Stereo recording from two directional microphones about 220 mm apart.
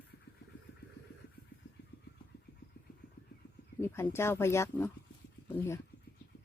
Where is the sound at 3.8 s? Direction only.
10° left (ahead or behind).